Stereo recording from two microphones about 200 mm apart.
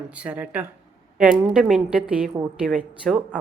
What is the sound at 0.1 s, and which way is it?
A woman's voice, 5° right (ahead or behind).